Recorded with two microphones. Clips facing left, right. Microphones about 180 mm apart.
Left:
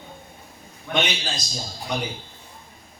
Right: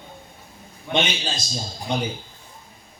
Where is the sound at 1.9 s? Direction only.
25° right (ahead or behind).